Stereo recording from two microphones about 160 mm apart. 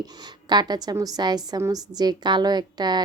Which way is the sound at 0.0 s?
25° right (ahead or behind).